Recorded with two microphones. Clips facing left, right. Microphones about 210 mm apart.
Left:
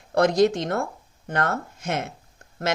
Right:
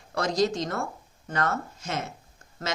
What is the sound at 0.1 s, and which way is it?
Speech, 60° left (ahead or behind).